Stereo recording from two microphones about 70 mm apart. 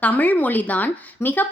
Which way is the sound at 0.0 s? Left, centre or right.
Left.